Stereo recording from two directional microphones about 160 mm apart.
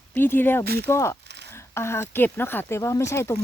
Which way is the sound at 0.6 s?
90° right.